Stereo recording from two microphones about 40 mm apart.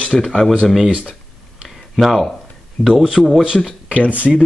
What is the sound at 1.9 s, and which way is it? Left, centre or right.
Speech, centre.